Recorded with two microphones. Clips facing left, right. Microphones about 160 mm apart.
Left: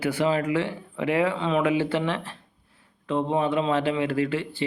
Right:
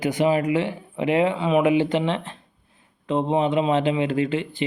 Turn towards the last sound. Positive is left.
turn(degrees=-20)  # may be behind; listen again after turning